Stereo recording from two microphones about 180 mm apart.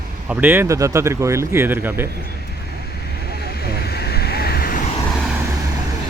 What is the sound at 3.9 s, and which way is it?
Vehicle, 60° left (ahead or behind).